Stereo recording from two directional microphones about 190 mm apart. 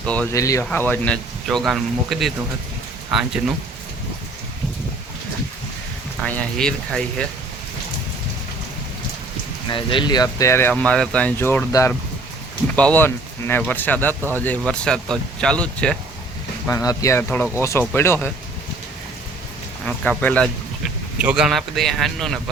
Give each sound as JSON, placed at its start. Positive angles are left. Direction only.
{"t": 0.0, "sound": "speech", "side_deg": 5}
{"t": 0.3, "sound": "speech", "side_deg": 15}
{"t": 6.2, "sound": "speech", "side_deg": 5}
{"t": 9.6, "sound": "speech", "side_deg": 25}
{"t": 16.6, "sound": "speech", "side_deg": 15}
{"t": 19.8, "sound": "speech", "side_deg": 5}